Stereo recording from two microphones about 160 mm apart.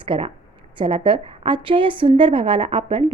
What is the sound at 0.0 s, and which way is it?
A woman's voice, 35° right (ahead or behind).